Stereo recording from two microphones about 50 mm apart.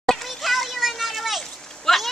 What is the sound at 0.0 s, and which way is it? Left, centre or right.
Children playing, centre.